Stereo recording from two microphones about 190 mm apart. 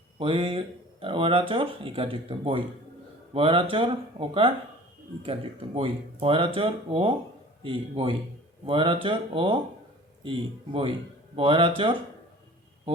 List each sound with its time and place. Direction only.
0.2 s speech: 25° right (ahead or behind)